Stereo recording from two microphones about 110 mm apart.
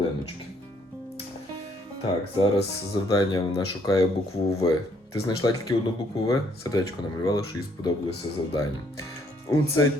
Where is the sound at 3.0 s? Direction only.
35° left (ahead or behind).